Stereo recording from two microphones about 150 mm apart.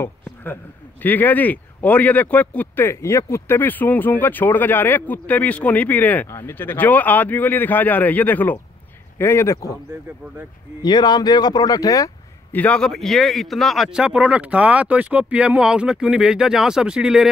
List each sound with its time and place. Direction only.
0.0 s a sound: 15° left (ahead or behind)
1.0 s speech: 10° left (ahead or behind)
10.8 s speech: 30° left (ahead or behind)
12.5 s a man's voice: 10° left (ahead or behind)